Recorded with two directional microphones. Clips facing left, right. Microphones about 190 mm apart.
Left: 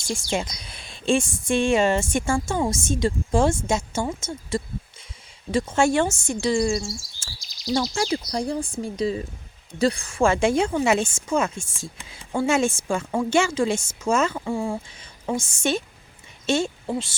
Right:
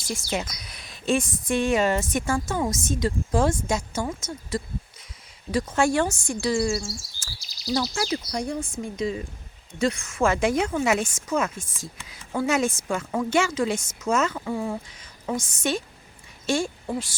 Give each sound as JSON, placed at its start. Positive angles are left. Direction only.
{"t": 0.0, "sound": "a woman's voice", "side_deg": 30}
{"t": 7.2, "sound": "chirp", "side_deg": 25}
{"t": 7.7, "sound": "a woman's voice", "side_deg": 30}